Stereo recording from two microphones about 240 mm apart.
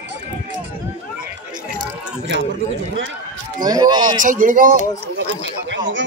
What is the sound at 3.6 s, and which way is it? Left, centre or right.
Speech, centre.